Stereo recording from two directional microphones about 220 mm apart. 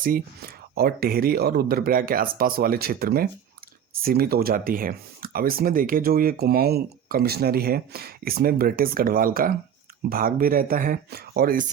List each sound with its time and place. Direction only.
0.0 s speech: 40° right (ahead or behind)